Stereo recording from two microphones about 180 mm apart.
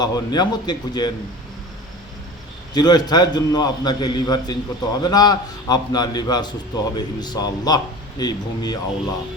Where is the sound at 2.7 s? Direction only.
20° left (ahead or behind).